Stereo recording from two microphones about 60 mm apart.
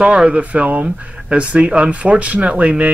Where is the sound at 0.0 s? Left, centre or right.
Centre.